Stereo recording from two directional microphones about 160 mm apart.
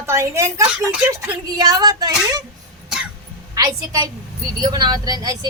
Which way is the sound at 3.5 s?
25° right (ahead or behind).